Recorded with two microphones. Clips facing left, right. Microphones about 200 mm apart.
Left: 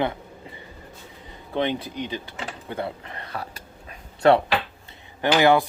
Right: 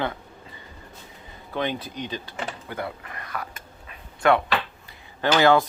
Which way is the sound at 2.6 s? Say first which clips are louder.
Left 2 dB; 25° left (ahead or behind).